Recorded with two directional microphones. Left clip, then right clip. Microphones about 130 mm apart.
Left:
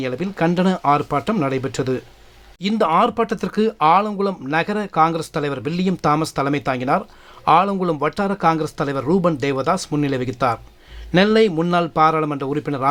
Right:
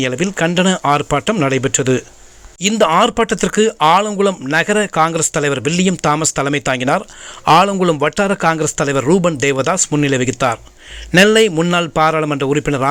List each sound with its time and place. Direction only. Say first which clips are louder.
0.0 s speech: right 5 dB; 20° right (ahead or behind)
4.0 s speech: right 7 dB; 5° right (ahead or behind)
4.4 s speech: right 6 dB; 15° right (ahead or behind)
6.0 s speech: left 1 dB; 5° right (ahead or behind)
7.4 s a man's voice: right 4 dB; 25° right (ahead or behind)
7.7 s a man's voice: right 6 dB; 10° right (ahead or behind)